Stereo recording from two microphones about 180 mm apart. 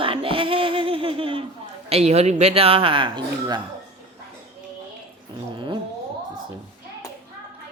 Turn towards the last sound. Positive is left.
turn(degrees=-25)  # may be behind; listen again after turning